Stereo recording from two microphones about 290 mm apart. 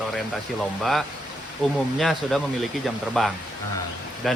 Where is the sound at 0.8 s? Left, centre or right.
Centre.